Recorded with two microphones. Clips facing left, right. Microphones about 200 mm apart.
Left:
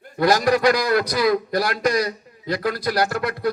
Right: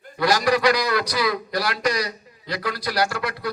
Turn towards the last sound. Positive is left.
turn(degrees=50)  # may be behind; listen again after turning